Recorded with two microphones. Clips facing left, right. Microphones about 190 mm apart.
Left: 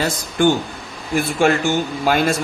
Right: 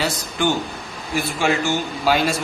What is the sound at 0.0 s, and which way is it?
A man's voice, 50° left (ahead or behind).